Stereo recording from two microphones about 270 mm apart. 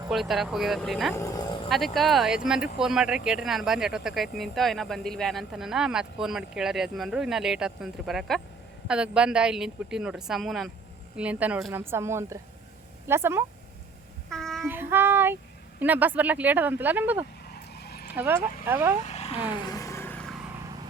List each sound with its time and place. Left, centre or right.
0.1 s speech: centre
1.2 s a sound: centre
1.7 s speech: centre
14.3 s child singing: centre
15.8 s speech: centre
17.5 s vehicle: left
18.1 s speech: centre
19.0 s vehicle: left; by 20.3 s centre